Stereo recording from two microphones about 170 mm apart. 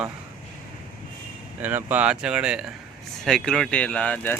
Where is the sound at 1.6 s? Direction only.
10° right (ahead or behind).